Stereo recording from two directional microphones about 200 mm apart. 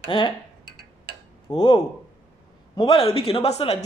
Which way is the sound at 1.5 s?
20° left (ahead or behind).